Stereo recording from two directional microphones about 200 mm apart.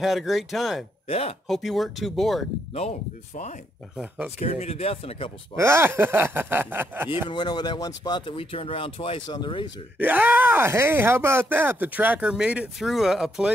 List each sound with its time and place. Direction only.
0.0 s speech: centre (ahead or behind)
1.0 s speech: 30° left (ahead or behind)
1.5 s speech: centre (ahead or behind)
2.7 s speech: 30° left (ahead or behind)
3.9 s speech: 5° right (ahead or behind)
4.4 s speech: 35° left (ahead or behind)
5.6 s speech: 15° right (ahead or behind)
7.2 s speech: 20° left (ahead or behind)
9.9 s speech: 10° right (ahead or behind)